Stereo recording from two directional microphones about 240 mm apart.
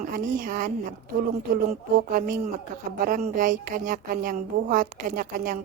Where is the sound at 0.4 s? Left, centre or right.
Right.